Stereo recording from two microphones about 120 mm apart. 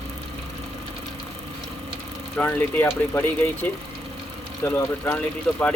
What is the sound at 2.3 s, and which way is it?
Speech, 15° left (ahead or behind).